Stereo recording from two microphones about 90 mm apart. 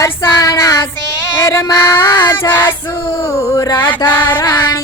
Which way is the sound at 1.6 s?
45° left (ahead or behind).